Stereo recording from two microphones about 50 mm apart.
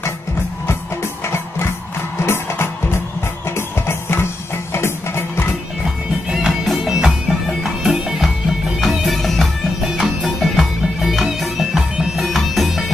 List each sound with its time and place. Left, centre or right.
1.2 s music: left
6.4 s music: centre